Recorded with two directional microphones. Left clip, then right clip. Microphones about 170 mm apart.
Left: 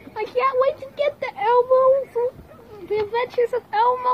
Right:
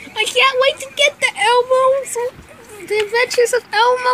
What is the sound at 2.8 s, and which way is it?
Speech, 30° right (ahead or behind).